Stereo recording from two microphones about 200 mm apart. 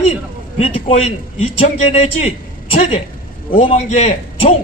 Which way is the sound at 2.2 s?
30° left (ahead or behind).